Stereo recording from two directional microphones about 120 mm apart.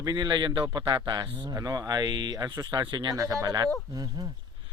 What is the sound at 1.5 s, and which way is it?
A man's voice, 30° right (ahead or behind).